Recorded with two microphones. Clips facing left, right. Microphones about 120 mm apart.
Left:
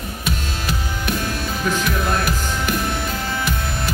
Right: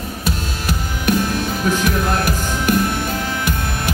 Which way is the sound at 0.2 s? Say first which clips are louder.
Right 2 dB; 45° right (ahead or behind).